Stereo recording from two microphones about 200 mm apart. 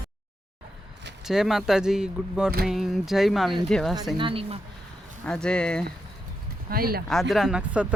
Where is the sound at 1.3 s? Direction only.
Centre (ahead or behind).